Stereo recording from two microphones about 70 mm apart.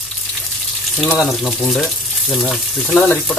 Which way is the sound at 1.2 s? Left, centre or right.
Centre.